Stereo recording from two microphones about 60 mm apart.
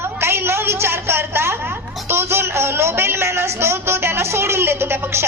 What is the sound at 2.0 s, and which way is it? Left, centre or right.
Speech, right.